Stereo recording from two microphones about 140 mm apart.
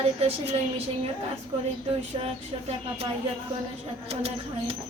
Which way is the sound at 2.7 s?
50° right (ahead or behind).